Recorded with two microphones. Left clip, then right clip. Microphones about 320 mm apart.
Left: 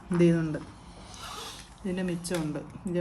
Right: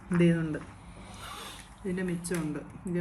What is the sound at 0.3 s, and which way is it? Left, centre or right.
Speech, centre.